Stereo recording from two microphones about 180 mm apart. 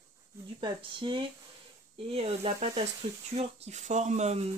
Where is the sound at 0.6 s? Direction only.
25° right (ahead or behind).